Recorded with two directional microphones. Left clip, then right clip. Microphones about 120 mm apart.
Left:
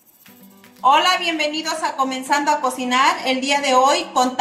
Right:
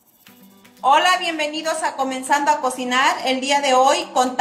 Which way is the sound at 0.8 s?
20° right (ahead or behind).